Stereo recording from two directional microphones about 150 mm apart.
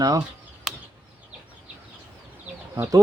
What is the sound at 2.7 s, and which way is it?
Speech, 20° right (ahead or behind).